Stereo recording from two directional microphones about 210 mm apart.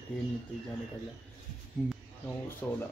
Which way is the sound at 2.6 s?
10° left (ahead or behind).